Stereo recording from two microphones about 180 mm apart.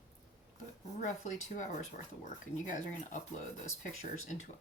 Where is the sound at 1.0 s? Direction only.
45° left (ahead or behind).